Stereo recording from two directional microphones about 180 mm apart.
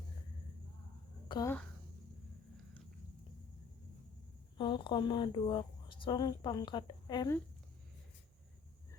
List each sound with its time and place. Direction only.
1.3 s speech: 20° left (ahead or behind)
4.5 s a woman's voice: 25° left (ahead or behind)